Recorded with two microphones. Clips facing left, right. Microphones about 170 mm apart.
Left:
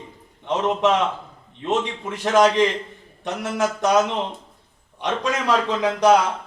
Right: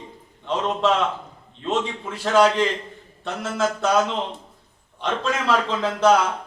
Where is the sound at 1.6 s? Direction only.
15° left (ahead or behind).